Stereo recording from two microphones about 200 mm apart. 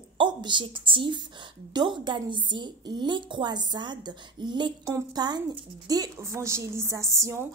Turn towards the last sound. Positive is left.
turn(degrees=-15)  # may be behind; listen again after turning